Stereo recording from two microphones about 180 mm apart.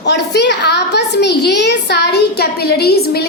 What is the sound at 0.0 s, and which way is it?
A child's voice, 70° left (ahead or behind).